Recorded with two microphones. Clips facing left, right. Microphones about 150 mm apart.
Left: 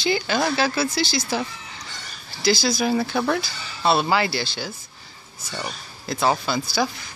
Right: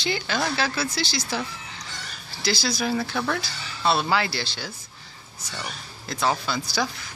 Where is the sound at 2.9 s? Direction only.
15° left (ahead or behind).